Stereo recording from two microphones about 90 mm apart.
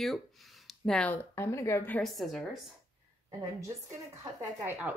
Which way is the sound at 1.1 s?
25° left (ahead or behind).